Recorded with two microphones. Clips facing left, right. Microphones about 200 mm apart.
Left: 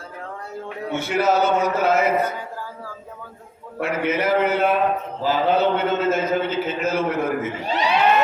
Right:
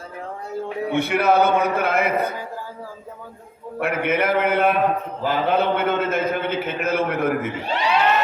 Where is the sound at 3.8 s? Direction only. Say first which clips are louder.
Right 1 dB; 55° right (ahead or behind).